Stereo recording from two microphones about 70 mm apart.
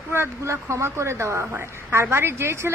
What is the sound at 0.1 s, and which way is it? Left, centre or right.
A woman's voice, right.